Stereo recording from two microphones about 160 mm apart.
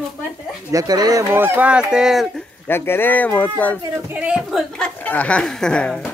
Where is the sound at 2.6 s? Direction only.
15° left (ahead or behind).